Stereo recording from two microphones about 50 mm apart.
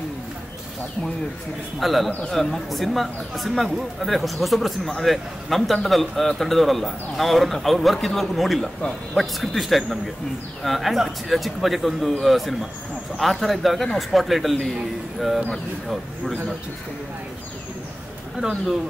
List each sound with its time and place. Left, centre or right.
1.8 s speech: centre
2.0 s a man's voice: left
2.3 s speech: centre